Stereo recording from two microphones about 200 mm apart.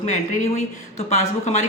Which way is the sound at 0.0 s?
40° left (ahead or behind).